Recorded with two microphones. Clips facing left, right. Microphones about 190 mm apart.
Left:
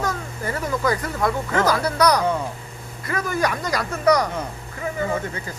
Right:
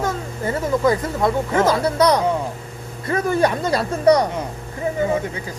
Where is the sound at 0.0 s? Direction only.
25° right (ahead or behind).